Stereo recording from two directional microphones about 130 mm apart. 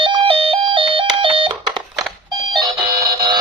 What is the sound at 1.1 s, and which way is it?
Smoke detector, 45° right (ahead or behind).